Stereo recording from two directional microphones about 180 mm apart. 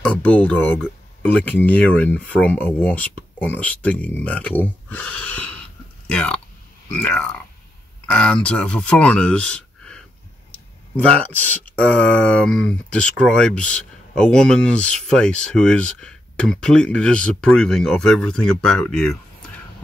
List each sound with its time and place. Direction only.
0.0 s speech: 5° left (ahead or behind)